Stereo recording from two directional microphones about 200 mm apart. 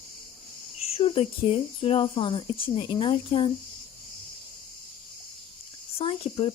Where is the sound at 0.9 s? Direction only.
30° left (ahead or behind).